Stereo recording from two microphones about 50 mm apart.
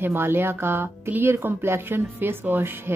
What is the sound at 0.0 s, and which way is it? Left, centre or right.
Speech, right.